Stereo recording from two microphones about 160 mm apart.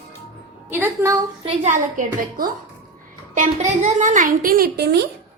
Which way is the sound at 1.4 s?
45° right (ahead or behind).